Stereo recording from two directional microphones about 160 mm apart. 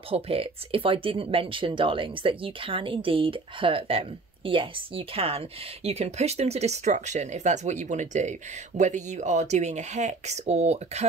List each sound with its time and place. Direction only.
0.1 s speech: 35° right (ahead or behind)